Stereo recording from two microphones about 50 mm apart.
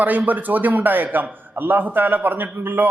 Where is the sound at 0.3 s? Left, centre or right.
Right.